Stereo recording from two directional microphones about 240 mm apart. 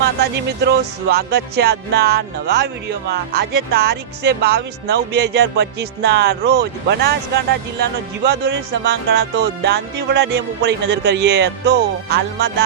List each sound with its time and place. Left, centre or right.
0.2 s speech: right